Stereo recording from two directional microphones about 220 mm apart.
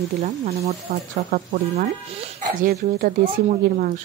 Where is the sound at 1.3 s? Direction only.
40° right (ahead or behind).